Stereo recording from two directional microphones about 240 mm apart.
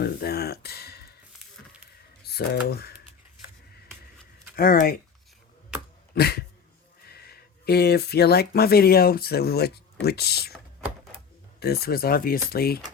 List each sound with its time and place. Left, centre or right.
0.0 s a sound: left
2.2 s speech: left
4.5 s speech: left
6.1 s speech: left
11.6 s speech: left